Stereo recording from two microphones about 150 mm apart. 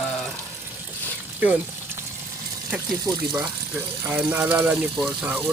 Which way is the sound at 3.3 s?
15° right (ahead or behind).